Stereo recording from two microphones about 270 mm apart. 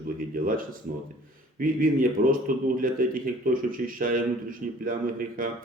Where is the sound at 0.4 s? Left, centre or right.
Right.